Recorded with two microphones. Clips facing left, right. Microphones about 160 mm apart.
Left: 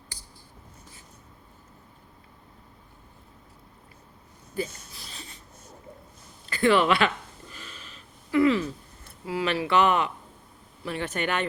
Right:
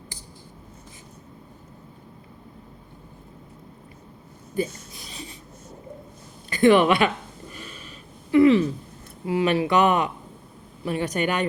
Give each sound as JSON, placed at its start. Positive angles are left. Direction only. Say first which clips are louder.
{"t": 6.5, "sound": "speech", "louder": "right 5 dB", "side_deg": -20}
{"t": 8.3, "sound": "a sound", "louder": "right 6 dB", "side_deg": -25}
{"t": 9.2, "sound": "speech", "louder": "right 6 dB", "side_deg": -25}